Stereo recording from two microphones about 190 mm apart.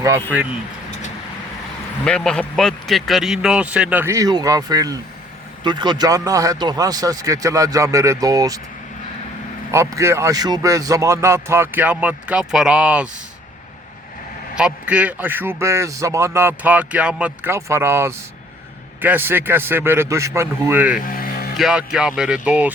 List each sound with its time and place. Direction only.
0.0 s a man's voice: 10° right (ahead or behind)
2.0 s speech: 5° left (ahead or behind); by 8.6 s 20° right (ahead or behind)
9.7 s a man's voice: 15° right (ahead or behind)
14.5 s a man's voice: 5° right (ahead or behind)
21.0 s vehicle: 50° left (ahead or behind)
21.6 s speech: 5° right (ahead or behind)